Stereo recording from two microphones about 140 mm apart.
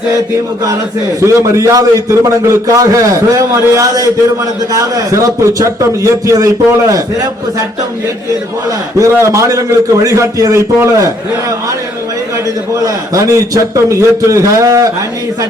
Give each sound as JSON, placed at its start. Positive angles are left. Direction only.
{"t": 1.2, "sound": "a man's voice", "side_deg": -20}
{"t": 9.0, "sound": "a man's voice", "side_deg": -20}
{"t": 12.8, "sound": "a man's voice", "side_deg": -25}